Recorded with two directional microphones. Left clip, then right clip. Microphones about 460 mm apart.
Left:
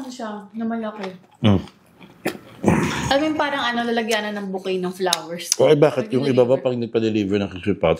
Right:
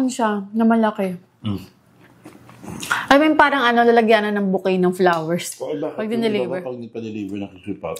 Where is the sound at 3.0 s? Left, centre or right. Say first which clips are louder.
Right 9 dB; right.